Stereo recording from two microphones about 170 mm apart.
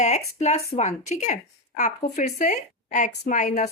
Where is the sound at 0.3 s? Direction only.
40° left (ahead or behind).